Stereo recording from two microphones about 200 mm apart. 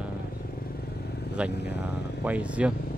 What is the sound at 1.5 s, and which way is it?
Speech, 55° left (ahead or behind).